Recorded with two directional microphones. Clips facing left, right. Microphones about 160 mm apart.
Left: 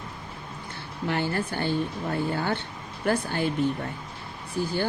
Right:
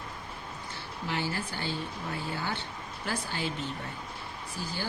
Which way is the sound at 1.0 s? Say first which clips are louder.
Left 6 dB; 55° left (ahead or behind).